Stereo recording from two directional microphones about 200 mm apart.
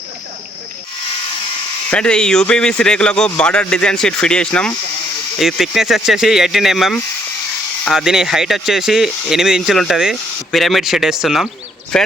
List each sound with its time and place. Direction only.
1.9 s speech: 5° left (ahead or behind)